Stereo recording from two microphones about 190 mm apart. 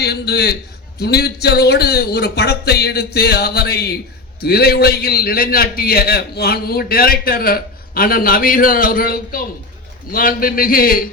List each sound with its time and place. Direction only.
0.0 s a man's voice: 60° left (ahead or behind)